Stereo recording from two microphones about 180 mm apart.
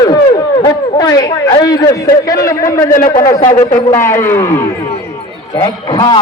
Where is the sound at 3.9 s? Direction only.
15° left (ahead or behind).